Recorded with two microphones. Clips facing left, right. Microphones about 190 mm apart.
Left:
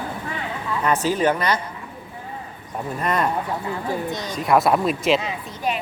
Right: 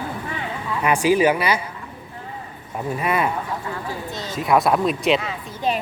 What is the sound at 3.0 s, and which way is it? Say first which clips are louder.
Speech: even; 5° right (ahead or behind).